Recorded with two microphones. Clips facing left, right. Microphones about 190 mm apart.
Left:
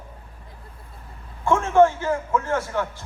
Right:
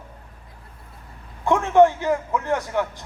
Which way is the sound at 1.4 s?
15° right (ahead or behind).